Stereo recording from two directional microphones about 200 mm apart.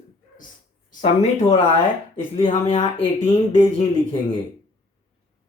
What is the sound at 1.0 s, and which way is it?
Speech, 30° left (ahead or behind).